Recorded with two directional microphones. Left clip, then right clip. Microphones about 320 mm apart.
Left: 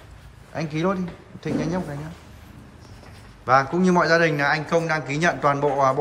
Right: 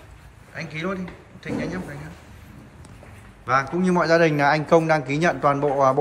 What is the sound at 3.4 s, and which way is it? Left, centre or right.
Speech, centre.